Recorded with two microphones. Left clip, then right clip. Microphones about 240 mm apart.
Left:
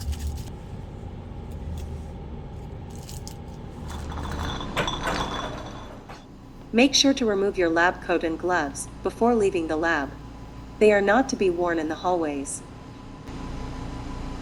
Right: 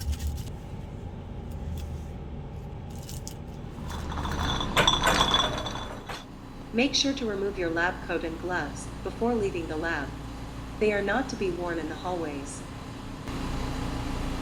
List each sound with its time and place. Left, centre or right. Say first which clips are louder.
3.9 s mechanisms: right 2 dB; centre
6.7 s a woman's voice: left 6 dB; left